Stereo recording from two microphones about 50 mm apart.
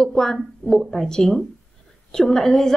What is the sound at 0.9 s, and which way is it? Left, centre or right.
Speech, centre.